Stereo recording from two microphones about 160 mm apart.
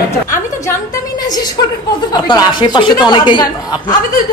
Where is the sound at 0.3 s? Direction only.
20° left (ahead or behind).